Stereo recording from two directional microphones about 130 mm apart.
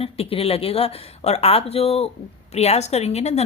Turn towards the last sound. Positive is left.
turn(degrees=55)  # may be behind; listen again after turning